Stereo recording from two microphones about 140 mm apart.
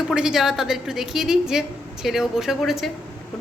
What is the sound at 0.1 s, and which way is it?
A woman's voice, 5° right (ahead or behind).